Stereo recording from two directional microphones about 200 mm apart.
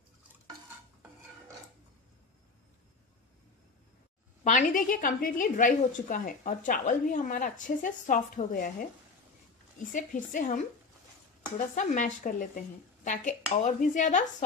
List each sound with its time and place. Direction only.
4.5 s a woman's voice: 40° left (ahead or behind)
9.9 s a woman's voice: 40° left (ahead or behind)